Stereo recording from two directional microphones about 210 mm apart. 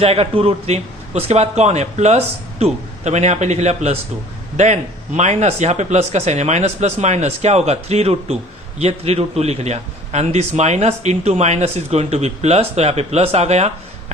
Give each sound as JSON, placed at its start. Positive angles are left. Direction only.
{"t": 0.0, "sound": "a man's voice", "side_deg": -30}